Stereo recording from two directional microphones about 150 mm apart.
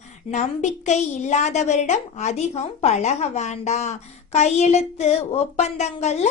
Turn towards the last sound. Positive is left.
turn(degrees=50)  # may be behind; listen again after turning